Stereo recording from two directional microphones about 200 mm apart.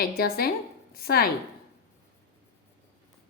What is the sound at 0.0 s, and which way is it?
A woman's voice, 50° left (ahead or behind).